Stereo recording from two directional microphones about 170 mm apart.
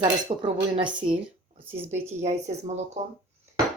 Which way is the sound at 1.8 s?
15° right (ahead or behind).